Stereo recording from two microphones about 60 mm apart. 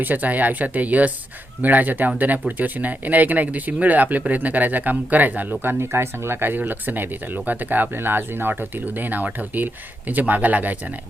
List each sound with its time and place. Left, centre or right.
0.0 s speech: right
5.8 s speech: right